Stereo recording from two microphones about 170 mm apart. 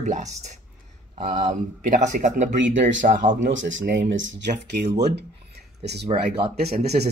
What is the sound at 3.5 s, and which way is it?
Speech, 90° right.